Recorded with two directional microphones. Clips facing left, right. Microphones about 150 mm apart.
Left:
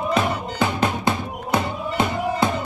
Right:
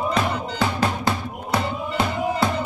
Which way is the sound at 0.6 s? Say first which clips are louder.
Left 2 dB; 20° left (ahead or behind).